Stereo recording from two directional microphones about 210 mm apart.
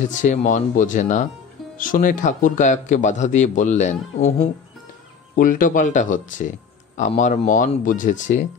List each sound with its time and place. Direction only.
0.1 s a man's voice: 35° left (ahead or behind)